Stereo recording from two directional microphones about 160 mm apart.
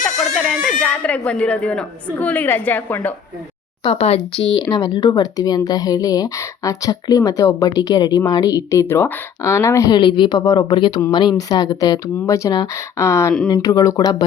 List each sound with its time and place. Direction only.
0.0 s a sound: centre (ahead or behind)
0.8 s a woman's voice: 5° left (ahead or behind)
3.8 s speech: 40° left (ahead or behind)
4.6 s speech: 25° left (ahead or behind)